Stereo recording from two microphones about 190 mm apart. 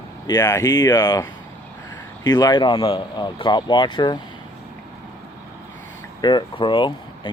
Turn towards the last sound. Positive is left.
turn(degrees=25)  # may be behind; listen again after turning